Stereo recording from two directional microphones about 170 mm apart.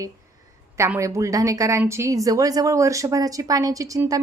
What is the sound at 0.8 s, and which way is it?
A woman's voice, 15° right (ahead or behind).